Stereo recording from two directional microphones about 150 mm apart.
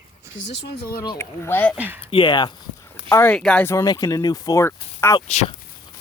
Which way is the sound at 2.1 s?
35° left (ahead or behind).